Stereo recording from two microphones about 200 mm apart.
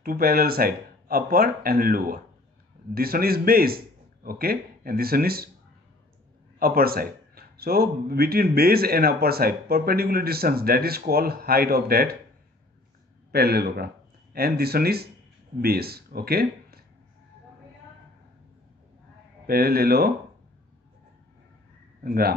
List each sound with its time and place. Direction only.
0.0 s a man's voice: 50° right (ahead or behind)
6.6 s a man's voice: 50° right (ahead or behind)
13.3 s a man's voice: 50° right (ahead or behind)
19.4 s a man's voice: 50° right (ahead or behind)
22.0 s speech: 50° right (ahead or behind)